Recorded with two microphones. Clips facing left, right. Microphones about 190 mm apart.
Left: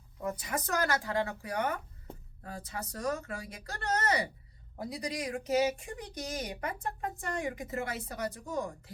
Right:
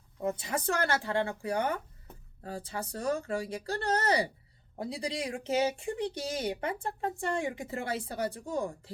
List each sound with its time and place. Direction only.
0.2 s speech: 25° right (ahead or behind)